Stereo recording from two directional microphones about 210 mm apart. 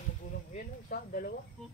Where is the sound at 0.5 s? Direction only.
40° left (ahead or behind).